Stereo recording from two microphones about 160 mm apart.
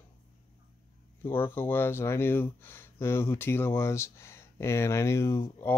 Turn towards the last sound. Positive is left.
turn(degrees=15)  # may be behind; listen again after turning